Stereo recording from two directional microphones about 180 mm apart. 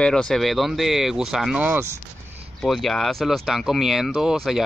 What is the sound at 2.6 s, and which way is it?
Speech, centre (ahead or behind).